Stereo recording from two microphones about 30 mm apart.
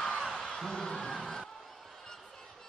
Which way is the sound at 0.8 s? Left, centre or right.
Left.